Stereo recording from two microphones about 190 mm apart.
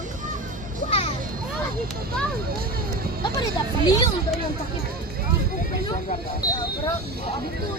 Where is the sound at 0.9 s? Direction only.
30° left (ahead or behind).